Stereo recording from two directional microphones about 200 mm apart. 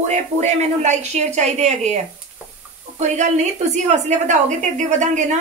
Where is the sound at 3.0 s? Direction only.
35° right (ahead or behind).